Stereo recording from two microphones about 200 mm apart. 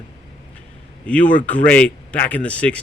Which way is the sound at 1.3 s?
5° left (ahead or behind).